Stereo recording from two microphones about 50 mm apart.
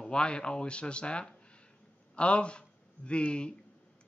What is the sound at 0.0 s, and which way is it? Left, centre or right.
Speech, centre.